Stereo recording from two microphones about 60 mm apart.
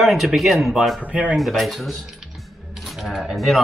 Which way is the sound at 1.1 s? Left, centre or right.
Centre.